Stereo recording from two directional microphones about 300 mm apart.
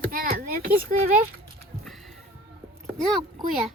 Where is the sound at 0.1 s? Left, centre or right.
Right.